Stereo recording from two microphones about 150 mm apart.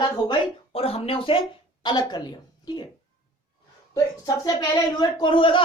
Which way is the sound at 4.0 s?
25° left (ahead or behind).